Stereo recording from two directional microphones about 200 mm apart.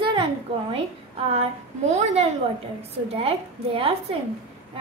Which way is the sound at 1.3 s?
35° right (ahead or behind).